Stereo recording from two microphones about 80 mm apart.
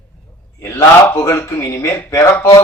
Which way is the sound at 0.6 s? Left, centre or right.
Left.